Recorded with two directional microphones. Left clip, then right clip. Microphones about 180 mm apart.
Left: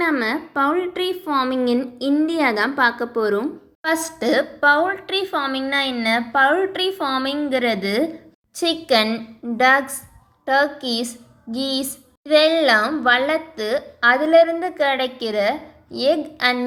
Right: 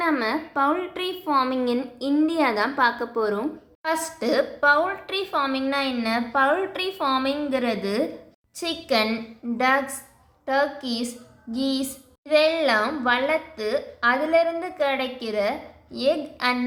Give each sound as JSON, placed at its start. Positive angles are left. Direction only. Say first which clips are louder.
{"t": 0.0, "sound": "a woman's voice", "louder": "left 3 dB", "side_deg": 20}